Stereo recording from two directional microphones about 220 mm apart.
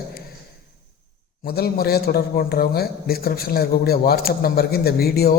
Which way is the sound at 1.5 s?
45° left (ahead or behind).